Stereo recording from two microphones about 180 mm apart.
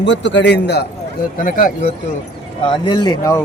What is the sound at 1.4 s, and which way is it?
Speech, 50° left (ahead or behind).